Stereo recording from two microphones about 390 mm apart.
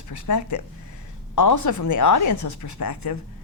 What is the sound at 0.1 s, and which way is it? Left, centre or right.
A woman's voice, left.